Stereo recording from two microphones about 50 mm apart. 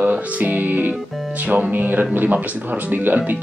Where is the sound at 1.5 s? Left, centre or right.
Right.